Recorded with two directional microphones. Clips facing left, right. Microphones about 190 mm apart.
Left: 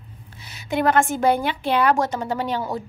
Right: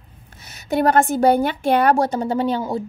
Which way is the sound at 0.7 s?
40° right (ahead or behind).